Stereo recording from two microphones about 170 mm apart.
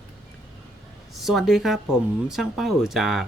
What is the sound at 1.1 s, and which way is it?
Speech, centre (ahead or behind).